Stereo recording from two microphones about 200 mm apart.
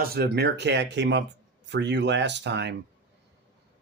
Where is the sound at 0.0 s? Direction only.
50° right (ahead or behind).